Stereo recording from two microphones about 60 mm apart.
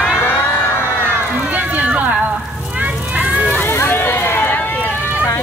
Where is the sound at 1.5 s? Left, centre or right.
Right.